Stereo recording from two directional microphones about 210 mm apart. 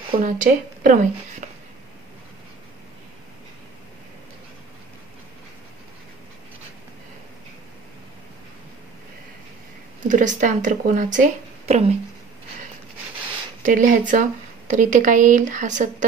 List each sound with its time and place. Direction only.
0.2 s speech: 40° right (ahead or behind)
10.0 s speech: 35° right (ahead or behind)
13.6 s speech: 40° right (ahead or behind)